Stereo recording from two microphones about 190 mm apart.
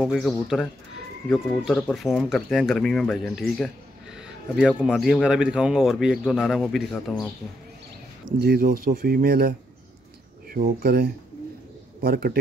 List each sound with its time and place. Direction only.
0.0 s speech: centre (ahead or behind)
4.7 s speech: 10° left (ahead or behind)
5.0 s speech: 5° right (ahead or behind)
8.4 s speech: 50° right (ahead or behind)
10.5 s speech: 50° right (ahead or behind)